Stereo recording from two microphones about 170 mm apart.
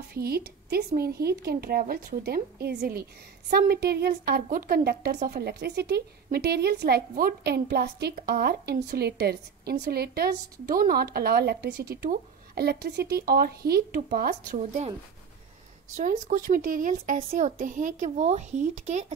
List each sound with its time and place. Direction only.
0.1 s a woman's voice: 65° right (ahead or behind)
14.6 s speech: 40° right (ahead or behind)
16.0 s speech: 50° right (ahead or behind)